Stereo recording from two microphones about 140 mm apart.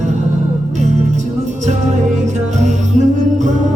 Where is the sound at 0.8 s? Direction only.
55° right (ahead or behind).